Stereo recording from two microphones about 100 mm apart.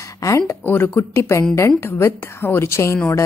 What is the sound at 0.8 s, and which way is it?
Speech, 30° left (ahead or behind).